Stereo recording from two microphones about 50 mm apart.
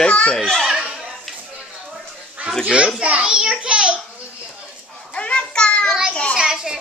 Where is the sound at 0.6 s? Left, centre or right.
Centre.